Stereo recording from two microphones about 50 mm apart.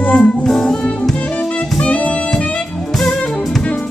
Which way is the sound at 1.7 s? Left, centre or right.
Left.